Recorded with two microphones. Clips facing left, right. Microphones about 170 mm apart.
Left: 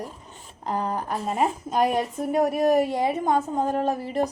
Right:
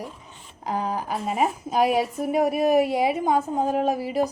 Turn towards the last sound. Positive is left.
turn(degrees=-10)  # may be behind; listen again after turning